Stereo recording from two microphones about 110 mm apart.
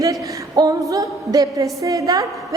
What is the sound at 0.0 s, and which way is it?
A woman's voice, 30° right (ahead or behind).